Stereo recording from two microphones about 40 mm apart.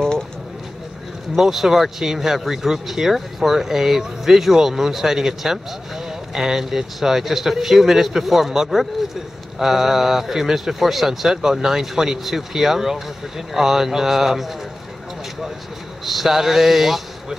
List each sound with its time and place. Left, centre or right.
1.3 s speech: centre
16.1 s speech: centre